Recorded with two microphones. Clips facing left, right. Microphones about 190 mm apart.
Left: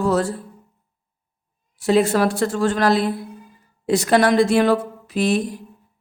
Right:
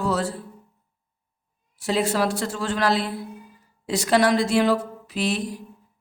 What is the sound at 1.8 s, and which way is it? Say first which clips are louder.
A woman's voice: left 6 dB; 55° left (ahead or behind).